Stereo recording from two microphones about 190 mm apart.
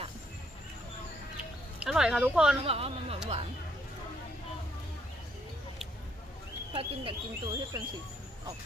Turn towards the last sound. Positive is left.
turn(degrees=-25)  # may be behind; listen again after turning